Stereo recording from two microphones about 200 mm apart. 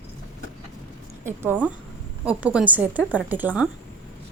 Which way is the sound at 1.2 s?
10° right (ahead or behind).